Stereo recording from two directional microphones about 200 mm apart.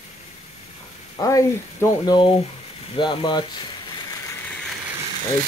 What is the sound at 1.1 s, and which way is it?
Speech, 15° left (ahead or behind).